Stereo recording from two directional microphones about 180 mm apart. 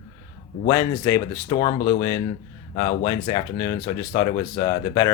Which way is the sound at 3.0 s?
25° left (ahead or behind).